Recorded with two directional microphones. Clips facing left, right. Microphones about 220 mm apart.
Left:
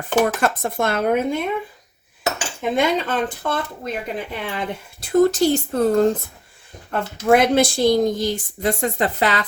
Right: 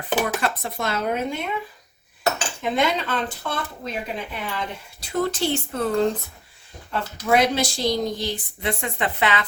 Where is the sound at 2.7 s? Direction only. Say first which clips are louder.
Left 4 dB; 50° left (ahead or behind).